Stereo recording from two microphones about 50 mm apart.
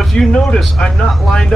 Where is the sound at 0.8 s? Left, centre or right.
Centre.